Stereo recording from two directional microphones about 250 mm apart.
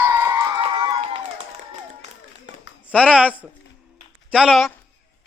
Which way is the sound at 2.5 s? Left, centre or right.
Right.